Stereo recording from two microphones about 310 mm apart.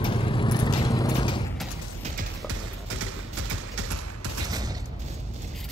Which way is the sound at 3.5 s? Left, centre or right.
Right.